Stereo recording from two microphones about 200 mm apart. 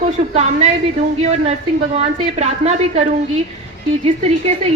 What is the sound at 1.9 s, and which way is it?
A woman's voice, 30° right (ahead or behind).